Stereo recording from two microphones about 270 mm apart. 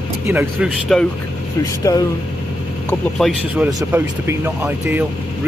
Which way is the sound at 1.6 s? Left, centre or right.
Centre.